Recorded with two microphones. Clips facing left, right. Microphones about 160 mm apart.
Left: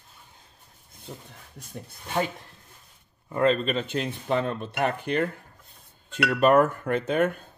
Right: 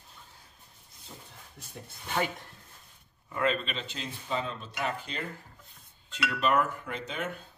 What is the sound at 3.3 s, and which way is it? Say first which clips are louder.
Speech: left 7 dB; 35° left (ahead or behind).